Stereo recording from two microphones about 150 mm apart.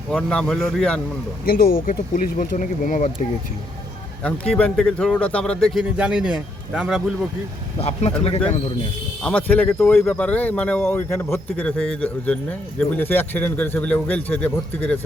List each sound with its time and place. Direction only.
0.1 s a man's voice: 5° left (ahead or behind)
1.5 s speech: 75° left (ahead or behind); by 3.1 s 60° left (ahead or behind)
4.2 s a man's voice: 10° left (ahead or behind)
7.8 s speech: 45° left (ahead or behind)
9.2 s speech: 10° left (ahead or behind)